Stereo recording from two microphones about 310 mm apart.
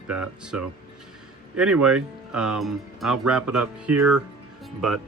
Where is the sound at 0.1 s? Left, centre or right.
Centre.